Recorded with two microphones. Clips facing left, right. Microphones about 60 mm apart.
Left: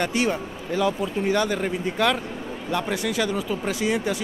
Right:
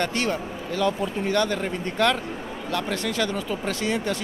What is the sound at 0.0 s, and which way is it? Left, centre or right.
Speech, centre.